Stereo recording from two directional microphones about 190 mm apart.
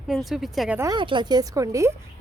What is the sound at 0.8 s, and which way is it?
Speech, 20° right (ahead or behind).